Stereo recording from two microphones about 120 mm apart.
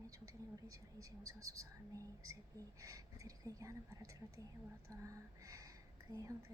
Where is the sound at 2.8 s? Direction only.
30° right (ahead or behind).